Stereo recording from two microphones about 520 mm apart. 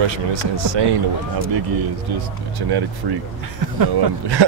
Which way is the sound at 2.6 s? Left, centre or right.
Right.